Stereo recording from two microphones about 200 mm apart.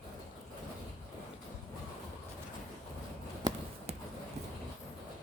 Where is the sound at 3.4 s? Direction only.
20° right (ahead or behind).